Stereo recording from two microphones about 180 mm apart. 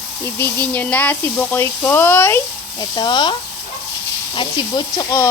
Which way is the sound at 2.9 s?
25° left (ahead or behind).